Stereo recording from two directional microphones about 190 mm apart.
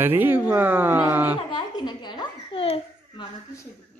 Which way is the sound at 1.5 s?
20° left (ahead or behind).